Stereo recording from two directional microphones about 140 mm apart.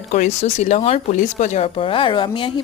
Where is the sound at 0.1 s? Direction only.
55° left (ahead or behind).